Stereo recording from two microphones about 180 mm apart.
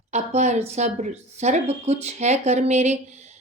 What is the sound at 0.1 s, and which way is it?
A woman's voice, 40° right (ahead or behind).